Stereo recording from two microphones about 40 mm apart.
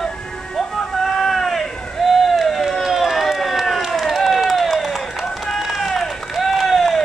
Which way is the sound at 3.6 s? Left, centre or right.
Centre.